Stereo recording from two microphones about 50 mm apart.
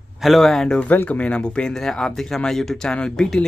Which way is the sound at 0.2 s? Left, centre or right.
Centre.